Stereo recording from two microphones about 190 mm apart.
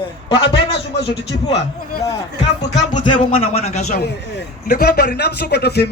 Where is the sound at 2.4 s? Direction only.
40° left (ahead or behind).